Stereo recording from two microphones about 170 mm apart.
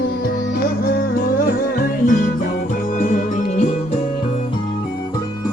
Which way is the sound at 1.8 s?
50° left (ahead or behind).